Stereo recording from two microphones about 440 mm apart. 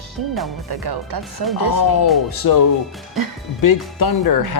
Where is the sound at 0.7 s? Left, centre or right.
Right.